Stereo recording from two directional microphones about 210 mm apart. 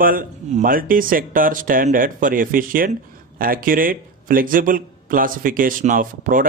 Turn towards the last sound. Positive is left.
turn(degrees=-40)  # may be behind; listen again after turning